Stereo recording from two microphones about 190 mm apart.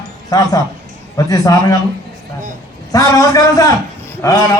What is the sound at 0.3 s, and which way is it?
A man's voice, 20° left (ahead or behind).